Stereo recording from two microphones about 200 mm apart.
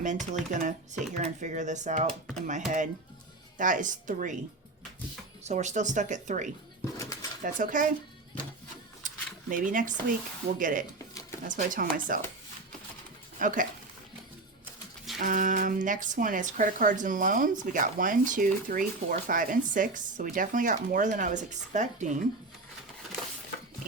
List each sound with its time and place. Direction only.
0.0 s speech: 40° right (ahead or behind)
5.4 s speech: 35° right (ahead or behind)
6.9 s pigeon: 15° left (ahead or behind)
7.4 s speech: 40° right (ahead or behind)
9.0 s a sound: 40° right (ahead or behind)
10.6 s speech: 40° right (ahead or behind)
11.1 s a sound: 15° left (ahead or behind)
11.4 s speech: 40° right (ahead or behind)
13.4 s speech: 40° right (ahead or behind)
15.2 s speech: 40° right (ahead or behind)